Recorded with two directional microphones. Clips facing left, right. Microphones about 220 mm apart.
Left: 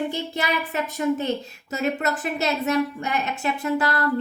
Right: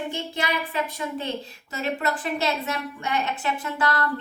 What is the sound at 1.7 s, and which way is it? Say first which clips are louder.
A woman's voice: left 3 dB; 40° left (ahead or behind).